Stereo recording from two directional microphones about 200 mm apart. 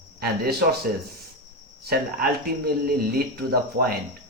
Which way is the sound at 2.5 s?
50° right (ahead or behind).